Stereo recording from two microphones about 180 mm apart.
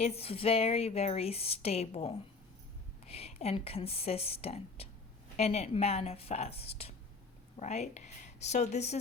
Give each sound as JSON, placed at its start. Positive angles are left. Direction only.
{"t": 0.0, "sound": "speech", "side_deg": 35}